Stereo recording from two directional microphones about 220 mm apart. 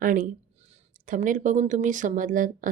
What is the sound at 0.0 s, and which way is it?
Speech, 40° right (ahead or behind).